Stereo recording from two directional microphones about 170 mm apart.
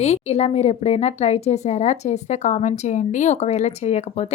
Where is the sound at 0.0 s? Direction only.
40° left (ahead or behind).